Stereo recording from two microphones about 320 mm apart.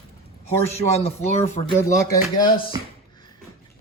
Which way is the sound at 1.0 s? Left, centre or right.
Left.